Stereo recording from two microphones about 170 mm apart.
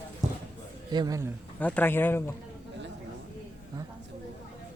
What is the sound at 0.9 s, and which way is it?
Speech, 25° right (ahead or behind).